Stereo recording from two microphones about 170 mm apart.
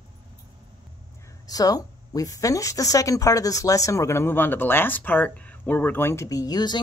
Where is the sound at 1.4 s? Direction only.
20° left (ahead or behind).